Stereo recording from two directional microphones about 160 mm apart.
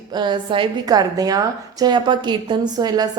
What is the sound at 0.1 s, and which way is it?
A woman's voice, 30° right (ahead or behind).